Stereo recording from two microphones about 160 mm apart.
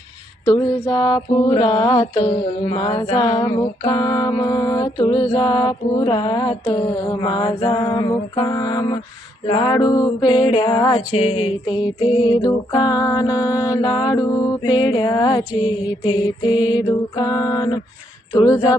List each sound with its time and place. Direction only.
0.4 s music: 25° left (ahead or behind)
1.5 s mantra: 30° left (ahead or behind)
3.1 s music: 35° left (ahead or behind)
18.3 s speech: 25° left (ahead or behind)
18.5 s music: 20° left (ahead or behind)